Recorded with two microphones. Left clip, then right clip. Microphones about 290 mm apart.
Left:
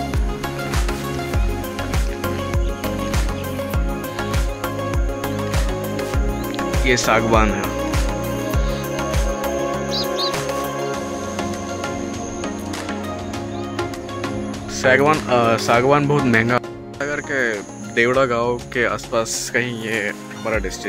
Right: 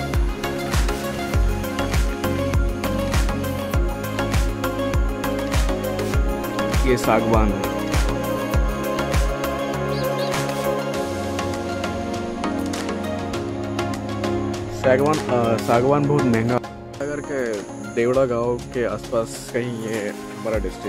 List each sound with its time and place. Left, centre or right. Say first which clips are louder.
6.7 s speech: left 3 dB; centre
8.5 s music: even; centre
9.9 s music: left 2 dB; right
14.8 s speech: left 3 dB; centre